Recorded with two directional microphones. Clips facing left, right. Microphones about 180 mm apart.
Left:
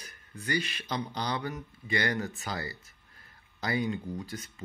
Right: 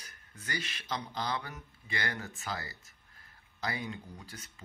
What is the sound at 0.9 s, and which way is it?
Speech, 35° left (ahead or behind).